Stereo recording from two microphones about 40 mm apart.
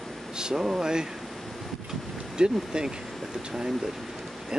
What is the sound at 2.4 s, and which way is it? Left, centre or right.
Speech, right.